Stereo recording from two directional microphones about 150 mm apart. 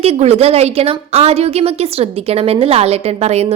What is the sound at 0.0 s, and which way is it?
A woman's voice, 45° right (ahead or behind).